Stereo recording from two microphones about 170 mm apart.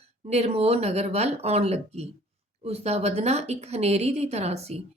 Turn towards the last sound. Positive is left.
turn(degrees=-40)  # may be behind; listen again after turning